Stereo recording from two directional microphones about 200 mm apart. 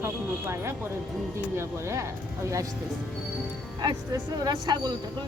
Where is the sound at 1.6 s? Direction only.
15° right (ahead or behind).